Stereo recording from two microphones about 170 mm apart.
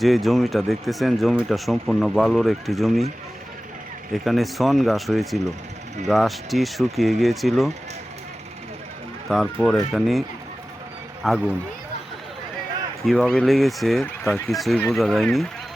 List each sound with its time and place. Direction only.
0.0 s speech: centre (ahead or behind)
4.1 s speech: centre (ahead or behind)
9.3 s speech: centre (ahead or behind)
13.1 s speech: centre (ahead or behind)